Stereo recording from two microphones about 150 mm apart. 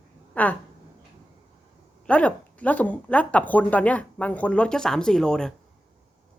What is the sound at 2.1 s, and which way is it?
A woman's voice, 10° left (ahead or behind).